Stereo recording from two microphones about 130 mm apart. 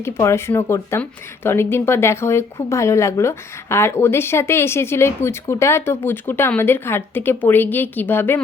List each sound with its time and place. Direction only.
0.0 s speech: 20° left (ahead or behind)